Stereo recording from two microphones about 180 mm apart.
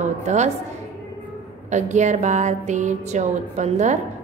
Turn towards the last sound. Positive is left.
turn(degrees=-40)  # may be behind; listen again after turning